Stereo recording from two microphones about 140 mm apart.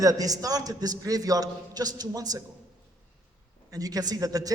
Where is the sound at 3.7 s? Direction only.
25° right (ahead or behind).